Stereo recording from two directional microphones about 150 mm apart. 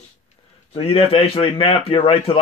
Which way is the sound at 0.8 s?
40° left (ahead or behind).